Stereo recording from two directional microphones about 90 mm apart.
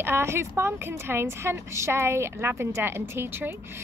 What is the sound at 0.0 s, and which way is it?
A woman's voice, 25° right (ahead or behind).